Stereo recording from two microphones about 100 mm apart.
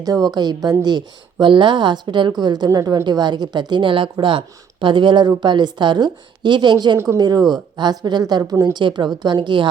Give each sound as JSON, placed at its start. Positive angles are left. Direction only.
{"t": 0.0, "sound": "a woman's voice", "side_deg": -40}